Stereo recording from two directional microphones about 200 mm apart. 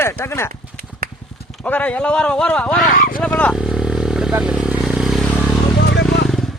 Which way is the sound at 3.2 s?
5° left (ahead or behind).